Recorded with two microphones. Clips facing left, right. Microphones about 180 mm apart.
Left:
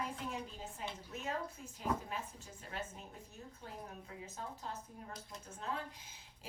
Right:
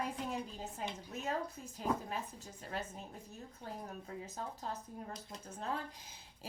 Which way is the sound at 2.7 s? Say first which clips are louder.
Right 3 dB; 35° right (ahead or behind).